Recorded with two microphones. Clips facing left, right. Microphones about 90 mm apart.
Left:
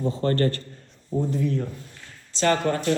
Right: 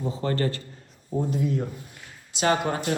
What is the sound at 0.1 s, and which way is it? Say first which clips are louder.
A man's voice: left 3 dB; 15° right (ahead or behind).